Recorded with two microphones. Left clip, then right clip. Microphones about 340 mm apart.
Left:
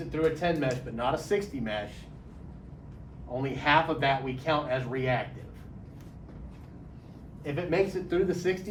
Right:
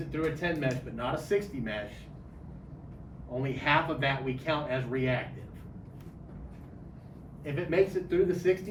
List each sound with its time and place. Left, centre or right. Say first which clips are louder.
0.1 s speech: left 5 dB; centre
3.3 s speech: left 3 dB; centre
7.4 s speech: even; centre